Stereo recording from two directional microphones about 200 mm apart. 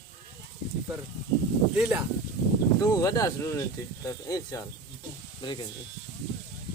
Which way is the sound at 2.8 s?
15° left (ahead or behind).